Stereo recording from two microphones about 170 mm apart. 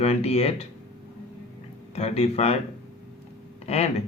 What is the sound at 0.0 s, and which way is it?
Speech, 40° left (ahead or behind).